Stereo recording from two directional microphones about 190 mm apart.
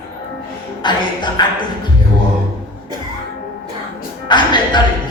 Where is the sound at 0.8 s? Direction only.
25° left (ahead or behind).